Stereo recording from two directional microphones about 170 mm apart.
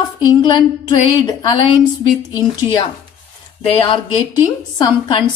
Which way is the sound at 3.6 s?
30° left (ahead or behind).